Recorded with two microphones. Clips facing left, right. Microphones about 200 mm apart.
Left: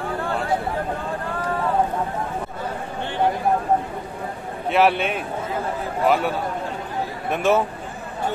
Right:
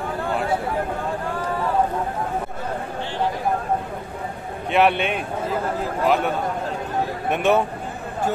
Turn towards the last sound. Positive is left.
turn(degrees=0)  # may be behind; listen again after turning